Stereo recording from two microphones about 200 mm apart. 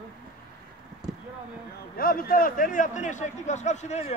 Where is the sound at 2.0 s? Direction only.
45° left (ahead or behind).